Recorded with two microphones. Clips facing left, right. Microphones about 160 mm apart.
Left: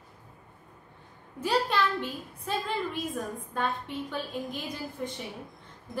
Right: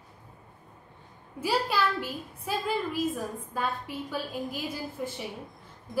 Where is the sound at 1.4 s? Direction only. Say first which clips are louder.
Even; 10° right (ahead or behind).